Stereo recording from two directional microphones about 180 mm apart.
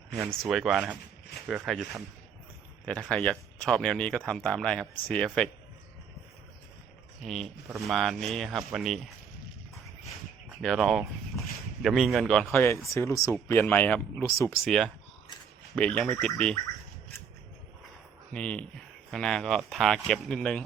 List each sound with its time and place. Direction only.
0.1 s speech: centre (ahead or behind)
7.2 s speech: centre (ahead or behind)
10.6 s speech: centre (ahead or behind)
14.6 s speech: centre (ahead or behind)
18.3 s speech: 5° left (ahead or behind)